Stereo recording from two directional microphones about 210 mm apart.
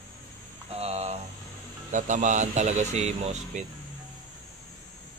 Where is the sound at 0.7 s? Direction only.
30° right (ahead or behind).